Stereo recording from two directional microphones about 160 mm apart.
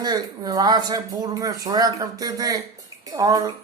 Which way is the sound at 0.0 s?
25° right (ahead or behind).